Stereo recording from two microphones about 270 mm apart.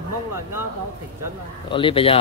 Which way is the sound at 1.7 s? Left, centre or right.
Centre.